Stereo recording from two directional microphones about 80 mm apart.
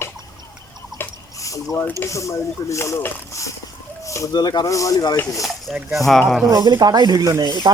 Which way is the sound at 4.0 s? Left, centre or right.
Left.